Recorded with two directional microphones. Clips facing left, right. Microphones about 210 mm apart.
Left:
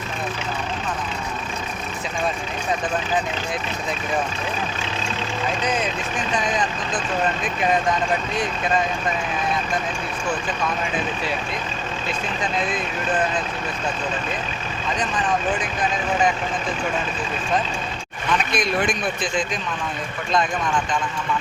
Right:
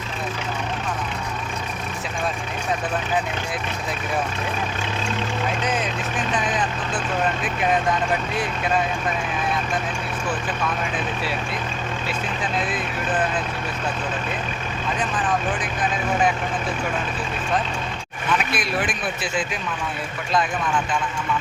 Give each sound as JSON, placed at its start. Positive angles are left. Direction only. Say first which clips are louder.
{"t": 12.0, "sound": "speech", "louder": "left 2 dB", "side_deg": -5}
{"t": 18.5, "sound": "speech", "louder": "left 3 dB", "side_deg": -5}